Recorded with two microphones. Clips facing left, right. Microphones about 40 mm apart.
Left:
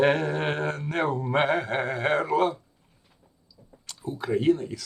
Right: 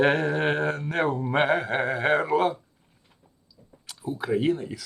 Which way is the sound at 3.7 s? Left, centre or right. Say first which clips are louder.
Right 2 dB; centre.